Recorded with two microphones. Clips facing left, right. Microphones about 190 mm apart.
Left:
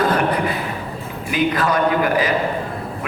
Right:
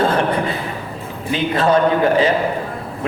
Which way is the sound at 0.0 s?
25° right (ahead or behind).